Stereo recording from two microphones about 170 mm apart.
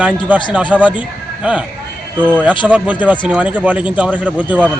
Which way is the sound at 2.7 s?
10° right (ahead or behind).